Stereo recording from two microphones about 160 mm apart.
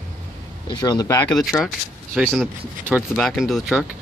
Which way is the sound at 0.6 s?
25° left (ahead or behind).